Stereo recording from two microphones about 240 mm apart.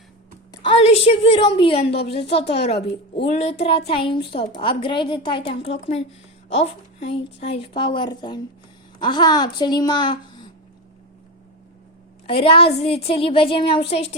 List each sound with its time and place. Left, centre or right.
0.5 s a woman's voice: left
12.2 s a woman's voice: left